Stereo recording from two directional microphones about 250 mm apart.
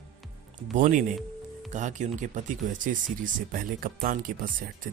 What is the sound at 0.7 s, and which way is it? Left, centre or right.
Speech, right.